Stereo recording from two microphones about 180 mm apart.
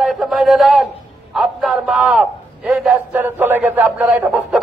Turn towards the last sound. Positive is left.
turn(degrees=0)  # may be behind; listen again after turning